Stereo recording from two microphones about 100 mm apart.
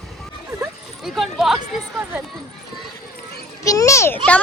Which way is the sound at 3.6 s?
30° left (ahead or behind).